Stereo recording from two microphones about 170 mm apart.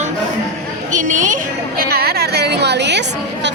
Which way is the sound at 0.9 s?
50° right (ahead or behind).